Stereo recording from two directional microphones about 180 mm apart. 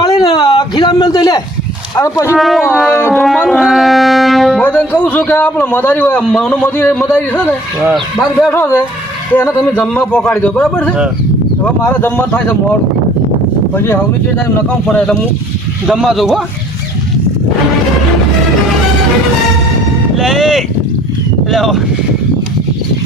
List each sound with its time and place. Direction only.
0.3 s a sound: 25° left (ahead or behind)
2.0 s a man's voice: 15° left (ahead or behind)
2.3 s a man's voice: centre (ahead or behind)
2.9 s a man's voice: 10° left (ahead or behind)
13.7 s a man's voice: 15° left (ahead or behind)
20.1 s a man's voice: centre (ahead or behind)